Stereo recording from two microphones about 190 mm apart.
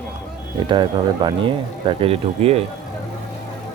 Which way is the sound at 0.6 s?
25° right (ahead or behind).